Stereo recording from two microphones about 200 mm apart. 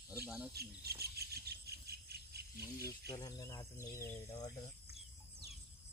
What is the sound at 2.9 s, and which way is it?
Speech, 20° left (ahead or behind).